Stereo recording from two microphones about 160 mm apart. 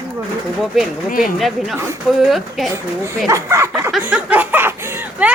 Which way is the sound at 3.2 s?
20° right (ahead or behind).